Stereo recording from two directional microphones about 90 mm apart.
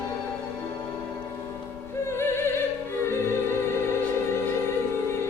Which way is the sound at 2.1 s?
30° left (ahead or behind).